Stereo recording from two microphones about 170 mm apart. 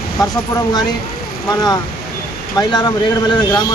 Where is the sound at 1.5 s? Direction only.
20° left (ahead or behind).